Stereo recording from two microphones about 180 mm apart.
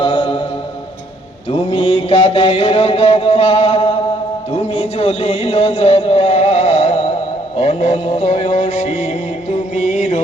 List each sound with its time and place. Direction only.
0.0 s music: 30° left (ahead or behind)
1.5 s mantra: 30° left (ahead or behind)
4.5 s a sound: 35° left (ahead or behind)
7.6 s mantra: 40° left (ahead or behind)
9.7 s music: 40° left (ahead or behind)